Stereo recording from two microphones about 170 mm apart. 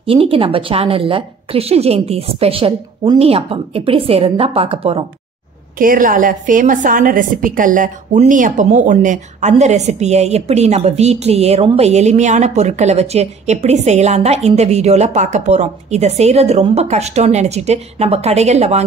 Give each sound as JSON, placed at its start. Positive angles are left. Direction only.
{"t": 0.0, "sound": "a woman's voice", "side_deg": -35}
{"t": 5.8, "sound": "a woman's voice", "side_deg": -55}